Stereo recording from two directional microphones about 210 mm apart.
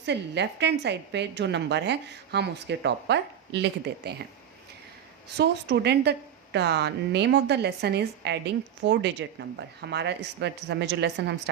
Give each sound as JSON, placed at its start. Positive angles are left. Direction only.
{"t": 0.0, "sound": "a woman's voice", "side_deg": -55}
{"t": 5.4, "sound": "a woman's voice", "side_deg": -50}